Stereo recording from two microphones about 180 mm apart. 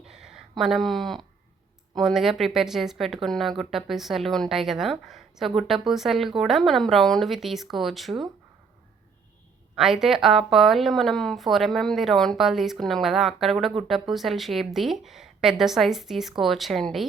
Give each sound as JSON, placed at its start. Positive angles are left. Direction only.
{"t": 0.0, "sound": "a sound", "side_deg": -5}
{"t": 2.0, "sound": "a woman's voice", "side_deg": 0}
{"t": 9.7, "sound": "a woman's voice", "side_deg": -5}